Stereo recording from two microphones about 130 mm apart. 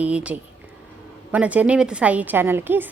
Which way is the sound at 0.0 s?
10° right (ahead or behind).